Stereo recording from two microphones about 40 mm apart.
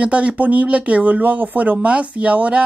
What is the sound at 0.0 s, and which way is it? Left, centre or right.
Speech, right.